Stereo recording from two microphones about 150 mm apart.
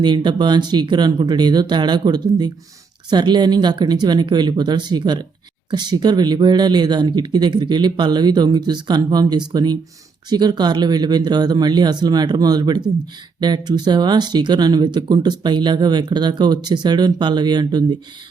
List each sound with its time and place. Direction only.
0.0 s speech: 30° right (ahead or behind)